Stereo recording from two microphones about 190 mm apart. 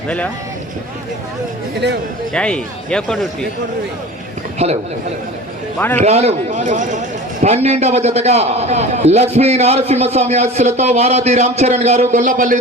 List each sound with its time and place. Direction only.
2.3 s speech: 5° left (ahead or behind)
4.5 s a man's voice: 35° right (ahead or behind)
6.0 s a man's voice: 35° right (ahead or behind)